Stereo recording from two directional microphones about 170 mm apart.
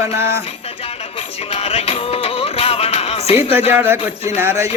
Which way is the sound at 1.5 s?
35° left (ahead or behind).